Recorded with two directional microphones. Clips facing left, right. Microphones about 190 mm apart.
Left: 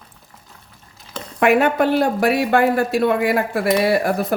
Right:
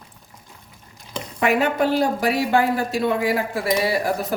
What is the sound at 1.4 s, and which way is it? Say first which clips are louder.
Speech: left 4 dB; 60° left (ahead or behind).